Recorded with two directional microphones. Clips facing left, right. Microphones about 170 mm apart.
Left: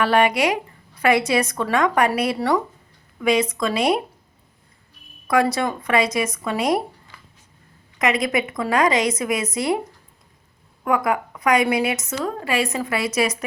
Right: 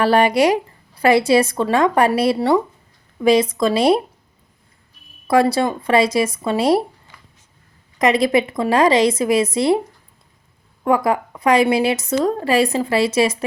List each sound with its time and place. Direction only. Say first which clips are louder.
0.0 s a woman's voice: right 4 dB; 35° right (ahead or behind)
5.3 s a woman's voice: right 4 dB; 30° right (ahead or behind)
7.9 s a woman's voice: right 5 dB; 35° right (ahead or behind)
10.8 s a woman's voice: right 4 dB; 30° right (ahead or behind)